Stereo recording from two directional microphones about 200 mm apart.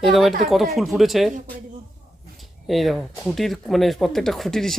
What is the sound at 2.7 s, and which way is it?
Speech, centre (ahead or behind).